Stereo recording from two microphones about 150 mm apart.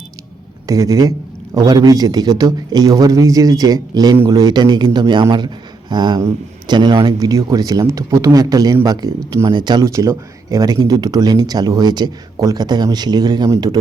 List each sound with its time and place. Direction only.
0.7 s speech: 25° right (ahead or behind)